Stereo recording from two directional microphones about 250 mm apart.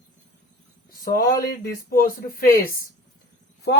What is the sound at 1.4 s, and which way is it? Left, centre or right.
Speech, left.